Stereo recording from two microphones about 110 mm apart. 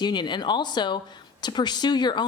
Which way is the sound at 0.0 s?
40° left (ahead or behind).